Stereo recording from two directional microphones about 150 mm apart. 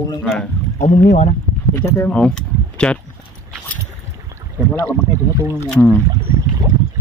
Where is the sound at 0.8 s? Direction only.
50° left (ahead or behind).